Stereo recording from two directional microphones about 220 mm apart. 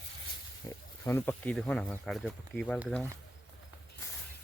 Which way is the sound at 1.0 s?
10° left (ahead or behind).